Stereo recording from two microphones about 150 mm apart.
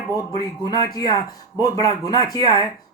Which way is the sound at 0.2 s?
25° left (ahead or behind).